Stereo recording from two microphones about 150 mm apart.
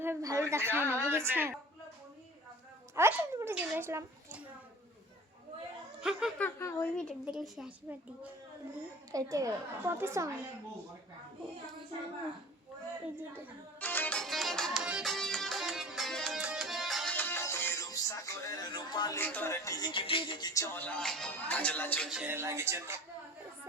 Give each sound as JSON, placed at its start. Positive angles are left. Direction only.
{"t": 0.0, "sound": "a sound", "side_deg": -20}
{"t": 1.1, "sound": "speech", "side_deg": -15}
{"t": 2.9, "sound": "a child's voice", "side_deg": -15}
{"t": 6.0, "sound": "speech", "side_deg": -5}
{"t": 6.4, "sound": "a woman's voice", "side_deg": 20}
{"t": 6.9, "sound": "music", "side_deg": 5}
{"t": 7.3, "sound": "a woman's voice", "side_deg": -5}
{"t": 9.1, "sound": "a woman's voice", "side_deg": -20}
{"t": 13.1, "sound": "speech", "side_deg": -15}
{"t": 13.7, "sound": "music", "side_deg": 10}
{"t": 17.2, "sound": "music", "side_deg": 15}
{"t": 19.2, "sound": "music", "side_deg": 15}
{"t": 22.1, "sound": "speech", "side_deg": -10}